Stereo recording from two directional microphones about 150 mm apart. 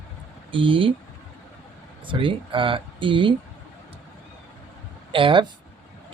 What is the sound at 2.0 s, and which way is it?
Speech, 35° right (ahead or behind).